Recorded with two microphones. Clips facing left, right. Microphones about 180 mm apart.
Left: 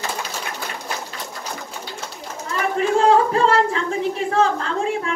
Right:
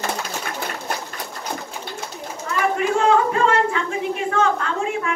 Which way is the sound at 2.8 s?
35° left (ahead or behind).